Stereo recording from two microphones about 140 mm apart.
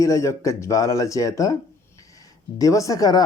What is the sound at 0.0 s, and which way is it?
Speech, 20° left (ahead or behind).